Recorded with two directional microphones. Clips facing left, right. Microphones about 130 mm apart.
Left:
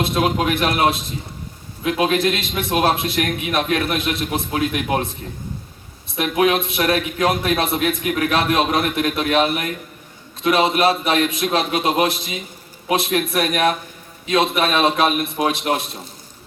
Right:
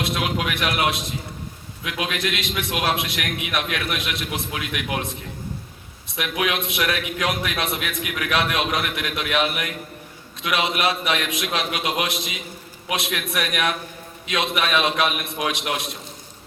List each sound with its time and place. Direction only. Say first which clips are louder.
0.0 s a man's voice: left 6 dB; 35° left (ahead or behind)
6.1 s a man's voice: left 7 dB; 40° left (ahead or behind)